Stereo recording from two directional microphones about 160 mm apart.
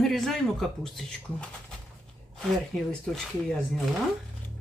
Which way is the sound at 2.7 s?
5° left (ahead or behind).